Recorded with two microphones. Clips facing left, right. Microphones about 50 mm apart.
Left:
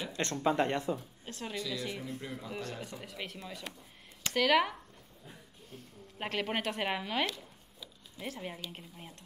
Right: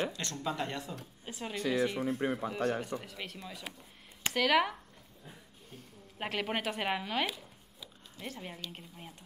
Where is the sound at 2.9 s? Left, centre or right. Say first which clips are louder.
Right 3 dB; centre.